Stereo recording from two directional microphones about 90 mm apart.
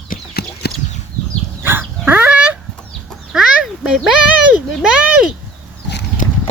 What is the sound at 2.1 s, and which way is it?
Chicken, 20° right (ahead or behind).